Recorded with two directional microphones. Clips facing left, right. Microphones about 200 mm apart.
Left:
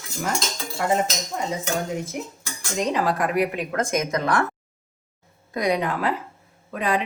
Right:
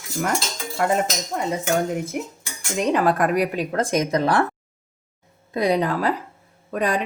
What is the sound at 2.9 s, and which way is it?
Speech, 55° right (ahead or behind).